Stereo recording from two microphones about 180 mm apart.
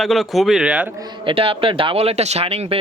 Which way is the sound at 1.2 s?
30° right (ahead or behind).